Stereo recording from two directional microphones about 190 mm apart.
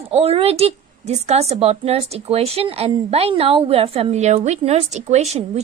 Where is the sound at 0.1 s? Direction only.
30° right (ahead or behind).